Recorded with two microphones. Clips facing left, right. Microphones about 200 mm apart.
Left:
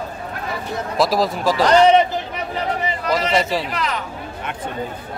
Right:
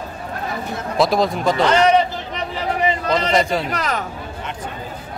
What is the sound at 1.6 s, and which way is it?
Speech, 35° left (ahead or behind).